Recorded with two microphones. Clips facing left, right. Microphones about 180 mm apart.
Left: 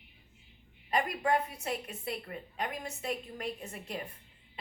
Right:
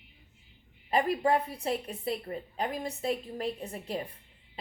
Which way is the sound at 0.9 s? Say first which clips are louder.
Right 4 dB; 30° right (ahead or behind).